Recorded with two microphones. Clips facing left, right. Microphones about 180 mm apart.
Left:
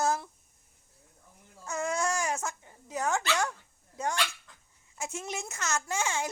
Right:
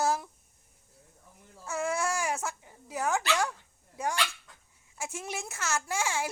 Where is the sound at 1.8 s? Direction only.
15° left (ahead or behind).